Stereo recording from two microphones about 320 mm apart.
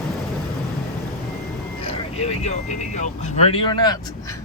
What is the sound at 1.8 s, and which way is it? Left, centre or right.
Speech, centre.